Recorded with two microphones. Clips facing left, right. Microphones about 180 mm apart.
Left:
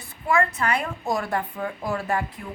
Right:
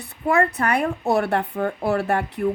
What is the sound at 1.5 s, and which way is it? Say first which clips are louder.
Speech: right 6 dB; 55° right (ahead or behind).